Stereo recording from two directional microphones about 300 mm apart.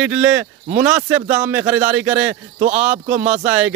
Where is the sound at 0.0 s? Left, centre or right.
Centre.